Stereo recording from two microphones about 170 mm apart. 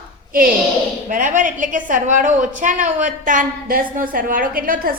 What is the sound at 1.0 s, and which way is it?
A woman's voice, 50° right (ahead or behind).